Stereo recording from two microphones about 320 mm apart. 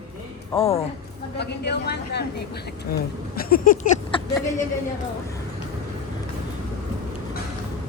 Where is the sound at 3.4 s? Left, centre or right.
Left.